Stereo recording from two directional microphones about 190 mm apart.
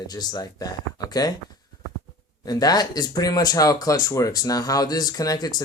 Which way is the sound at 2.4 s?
20° left (ahead or behind).